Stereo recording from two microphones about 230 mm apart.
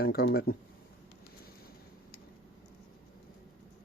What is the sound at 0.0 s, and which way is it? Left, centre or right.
Speech, left.